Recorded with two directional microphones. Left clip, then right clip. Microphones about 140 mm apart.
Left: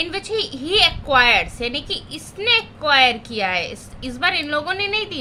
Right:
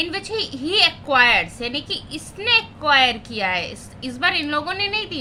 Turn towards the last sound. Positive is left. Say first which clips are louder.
# left 1 dB
turn(degrees=20)  # may be behind; listen again after turning